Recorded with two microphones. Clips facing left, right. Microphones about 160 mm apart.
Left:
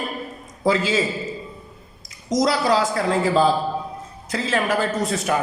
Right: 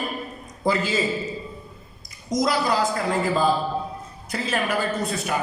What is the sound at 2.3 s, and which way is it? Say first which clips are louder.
A man's voice: left 3 dB; 90° left.